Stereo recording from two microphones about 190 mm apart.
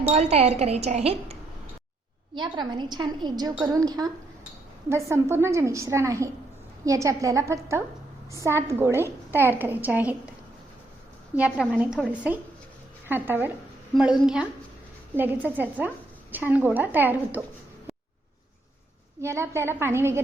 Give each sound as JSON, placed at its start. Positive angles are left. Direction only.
{"t": 0.1, "sound": "a woman's voice", "side_deg": -35}
{"t": 11.3, "sound": "a woman's voice", "side_deg": -5}
{"t": 13.1, "sound": "a woman's voice", "side_deg": -10}
{"t": 19.2, "sound": "a woman's voice", "side_deg": -15}